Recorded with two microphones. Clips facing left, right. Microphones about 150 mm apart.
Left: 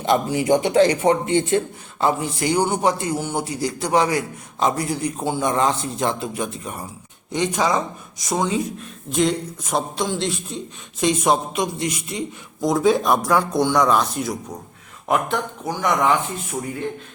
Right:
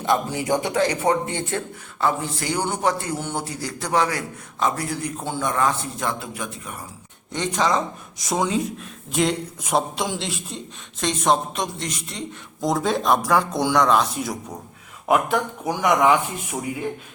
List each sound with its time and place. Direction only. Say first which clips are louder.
0.3 s a man's voice: left 5 dB; 20° left (ahead or behind)
7.3 s speech: left 2 dB; 10° left (ahead or behind)
8.2 s speech: left 1 dB; centre (ahead or behind)